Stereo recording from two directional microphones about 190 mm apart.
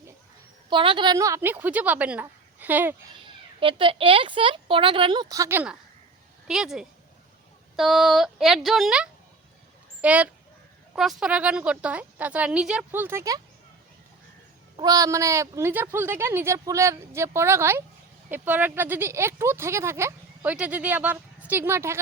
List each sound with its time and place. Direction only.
0.7 s speech: 25° right (ahead or behind); by 2.9 s 10° right (ahead or behind)
3.2 s speech: 25° right (ahead or behind)
14.8 s speech: 20° right (ahead or behind)